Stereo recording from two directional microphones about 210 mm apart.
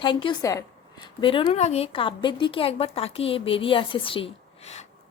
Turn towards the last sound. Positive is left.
turn(degrees=30)  # may be behind; listen again after turning